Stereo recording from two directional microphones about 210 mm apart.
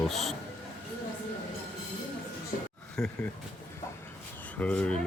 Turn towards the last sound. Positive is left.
turn(degrees=5)  # may be behind; listen again after turning